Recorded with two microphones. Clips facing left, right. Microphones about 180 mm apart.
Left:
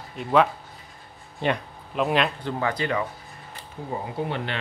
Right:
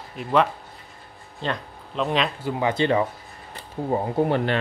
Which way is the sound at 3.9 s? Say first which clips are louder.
Right 7 dB; 45° right (ahead or behind).